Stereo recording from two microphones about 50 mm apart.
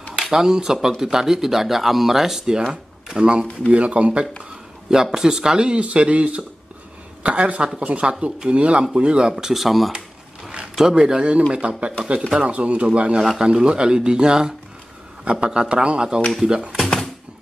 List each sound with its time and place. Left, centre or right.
0.2 s speech: centre
4.8 s speech: centre
9.3 s speech: centre
10.5 s speech: centre
16.7 s a sound: centre